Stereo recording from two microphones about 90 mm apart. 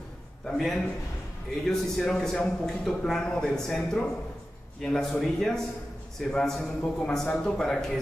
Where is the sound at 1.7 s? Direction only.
5° left (ahead or behind).